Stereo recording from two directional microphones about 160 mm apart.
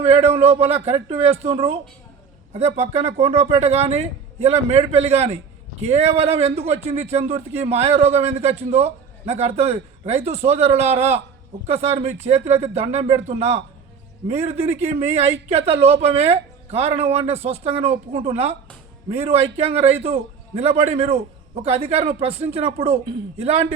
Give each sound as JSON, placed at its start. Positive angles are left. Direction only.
{"t": 0.0, "sound": "a man's voice", "side_deg": -35}